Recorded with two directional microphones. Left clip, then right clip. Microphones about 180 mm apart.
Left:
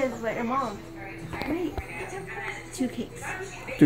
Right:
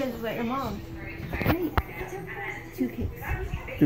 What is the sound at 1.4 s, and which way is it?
Speech, 60° right (ahead or behind).